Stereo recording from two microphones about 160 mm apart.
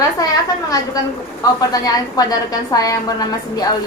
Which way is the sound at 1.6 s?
25° left (ahead or behind).